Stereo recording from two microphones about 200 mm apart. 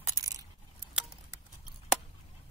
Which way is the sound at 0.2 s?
15° right (ahead or behind).